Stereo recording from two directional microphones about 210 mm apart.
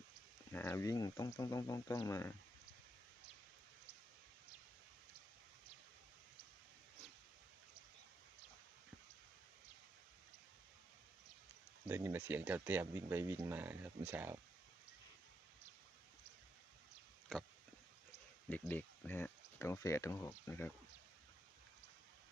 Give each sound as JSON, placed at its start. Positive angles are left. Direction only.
{"t": 0.5, "sound": "speech", "side_deg": 10}
{"t": 11.9, "sound": "speech", "side_deg": -10}
{"t": 18.4, "sound": "speech", "side_deg": 10}